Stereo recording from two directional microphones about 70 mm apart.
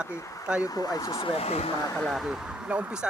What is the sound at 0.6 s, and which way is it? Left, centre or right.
Speech, left.